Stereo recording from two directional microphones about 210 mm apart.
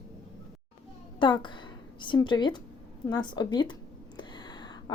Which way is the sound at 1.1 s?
20° left (ahead or behind).